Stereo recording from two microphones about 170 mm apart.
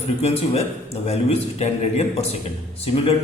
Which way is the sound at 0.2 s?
35° left (ahead or behind).